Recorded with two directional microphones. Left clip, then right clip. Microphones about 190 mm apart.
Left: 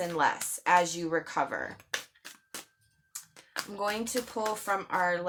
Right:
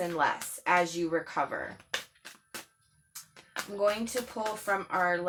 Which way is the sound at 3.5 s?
45° left (ahead or behind).